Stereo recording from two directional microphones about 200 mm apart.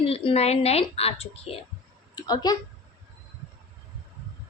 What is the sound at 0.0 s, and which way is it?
A woman's voice, 30° left (ahead or behind).